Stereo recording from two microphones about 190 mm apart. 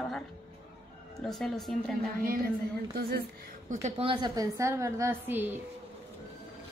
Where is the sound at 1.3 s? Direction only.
Centre (ahead or behind).